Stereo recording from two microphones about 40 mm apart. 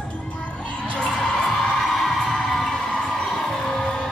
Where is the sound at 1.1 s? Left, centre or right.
Centre.